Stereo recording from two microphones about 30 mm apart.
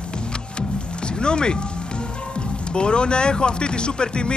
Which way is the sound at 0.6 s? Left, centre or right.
Left.